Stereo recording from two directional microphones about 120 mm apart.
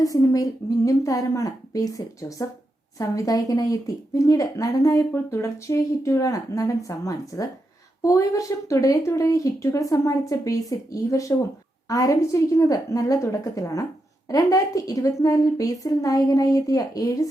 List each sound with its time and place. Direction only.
0.0 s a woman's voice: 30° left (ahead or behind)